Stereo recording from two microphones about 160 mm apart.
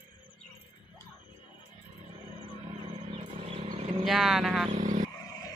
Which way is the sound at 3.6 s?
45° right (ahead or behind).